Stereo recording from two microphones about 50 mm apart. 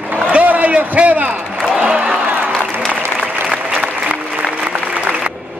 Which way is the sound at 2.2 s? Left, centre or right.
Right.